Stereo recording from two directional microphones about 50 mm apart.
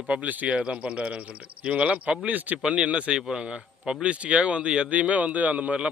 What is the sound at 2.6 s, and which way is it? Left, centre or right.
Speech, right.